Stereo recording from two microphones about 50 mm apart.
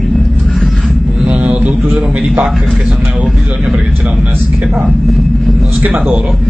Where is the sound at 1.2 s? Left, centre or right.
Right.